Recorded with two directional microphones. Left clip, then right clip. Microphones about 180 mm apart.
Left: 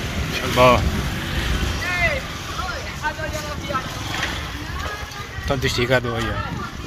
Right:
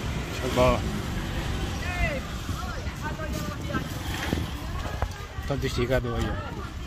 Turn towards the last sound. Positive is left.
turn(degrees=-15)  # may be behind; listen again after turning